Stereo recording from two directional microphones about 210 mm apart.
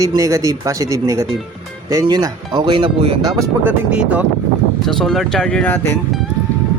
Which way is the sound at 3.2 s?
15° right (ahead or behind).